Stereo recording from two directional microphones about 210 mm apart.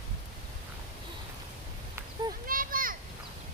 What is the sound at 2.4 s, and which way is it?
Children playing, 40° right (ahead or behind).